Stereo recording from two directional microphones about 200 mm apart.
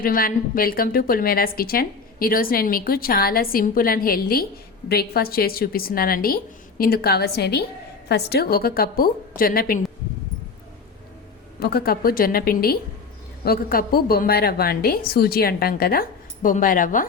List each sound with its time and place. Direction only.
0.0 s a woman's voice: 45° left (ahead or behind)
11.6 s a woman's voice: 50° left (ahead or behind)